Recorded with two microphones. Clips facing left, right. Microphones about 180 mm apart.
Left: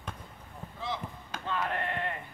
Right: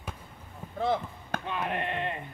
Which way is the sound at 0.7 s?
55° right (ahead or behind).